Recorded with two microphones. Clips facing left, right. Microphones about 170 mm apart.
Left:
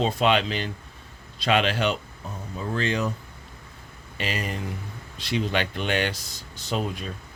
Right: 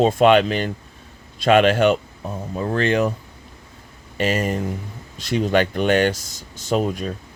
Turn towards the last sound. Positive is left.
turn(degrees=-45)  # may be behind; listen again after turning